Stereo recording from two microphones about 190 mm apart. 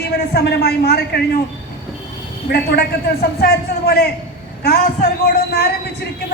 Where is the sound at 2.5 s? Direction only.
55° left (ahead or behind).